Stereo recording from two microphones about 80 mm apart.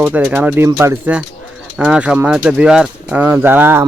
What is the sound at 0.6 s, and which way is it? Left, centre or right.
Speech, right.